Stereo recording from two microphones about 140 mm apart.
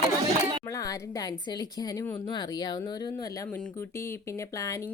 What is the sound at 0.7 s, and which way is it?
Speech, 25° left (ahead or behind).